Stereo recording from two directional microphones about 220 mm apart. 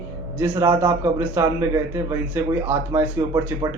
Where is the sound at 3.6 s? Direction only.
25° right (ahead or behind).